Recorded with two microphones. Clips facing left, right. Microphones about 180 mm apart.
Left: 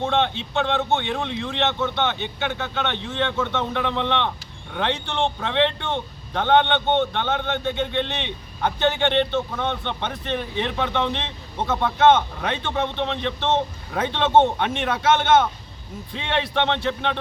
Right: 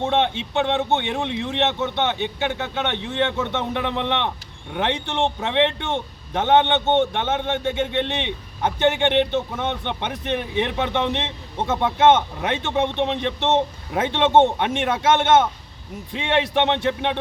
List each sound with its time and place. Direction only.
0.0 s a man's voice: 20° right (ahead or behind)